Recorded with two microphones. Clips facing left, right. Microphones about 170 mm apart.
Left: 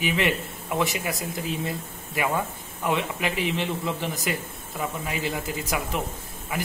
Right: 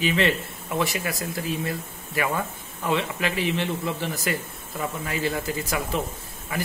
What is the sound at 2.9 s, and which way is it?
Speech, 15° left (ahead or behind).